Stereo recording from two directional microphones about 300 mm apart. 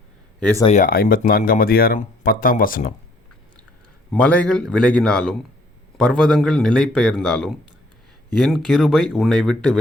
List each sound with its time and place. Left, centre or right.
0.3 s speech: centre
0.6 s speech: left
4.1 s a man's voice: centre